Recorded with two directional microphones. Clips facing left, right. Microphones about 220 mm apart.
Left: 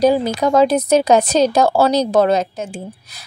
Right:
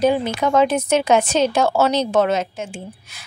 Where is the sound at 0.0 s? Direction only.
35° left (ahead or behind).